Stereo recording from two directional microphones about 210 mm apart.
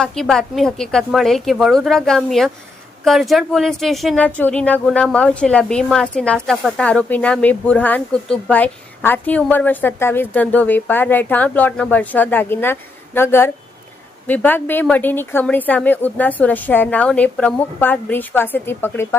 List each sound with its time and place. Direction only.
0.0 s a woman's voice: 5° left (ahead or behind)